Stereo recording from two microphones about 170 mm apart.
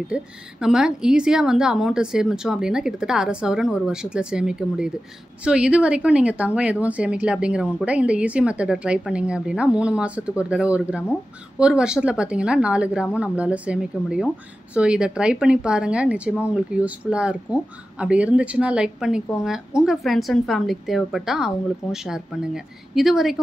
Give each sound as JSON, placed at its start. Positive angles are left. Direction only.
{"t": 0.1, "sound": "speech", "side_deg": -5}